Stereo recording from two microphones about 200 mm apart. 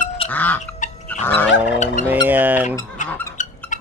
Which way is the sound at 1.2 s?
10° left (ahead or behind).